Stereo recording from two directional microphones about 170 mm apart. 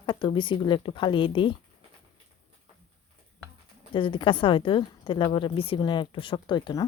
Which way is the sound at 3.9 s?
30° left (ahead or behind).